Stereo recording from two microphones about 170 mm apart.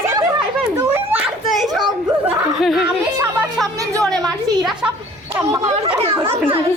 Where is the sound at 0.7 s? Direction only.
10° right (ahead or behind).